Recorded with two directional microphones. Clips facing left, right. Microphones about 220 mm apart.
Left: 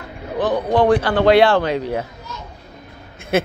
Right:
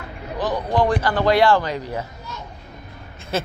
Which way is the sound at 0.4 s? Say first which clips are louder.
Left 4 dB; 55° left (ahead or behind).